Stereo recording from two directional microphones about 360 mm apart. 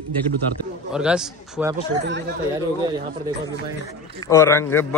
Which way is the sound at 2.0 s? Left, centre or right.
Right.